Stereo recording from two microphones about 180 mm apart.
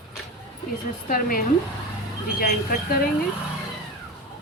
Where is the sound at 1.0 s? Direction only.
50° left (ahead or behind).